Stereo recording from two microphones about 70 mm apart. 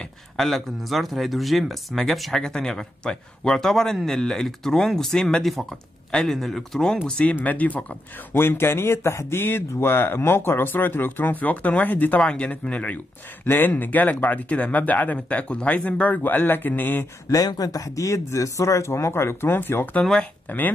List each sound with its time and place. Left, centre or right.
0.0 s speech: centre; by 8.0 s left
8.3 s speech: left
12.2 s speech: centre
17.3 s speech: left
20.0 s speech: centre
20.4 s speech: left